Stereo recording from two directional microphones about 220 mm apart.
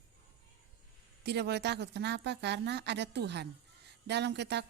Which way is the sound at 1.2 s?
50° right (ahead or behind).